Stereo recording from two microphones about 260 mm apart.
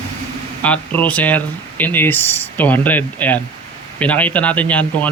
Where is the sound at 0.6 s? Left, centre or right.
Centre.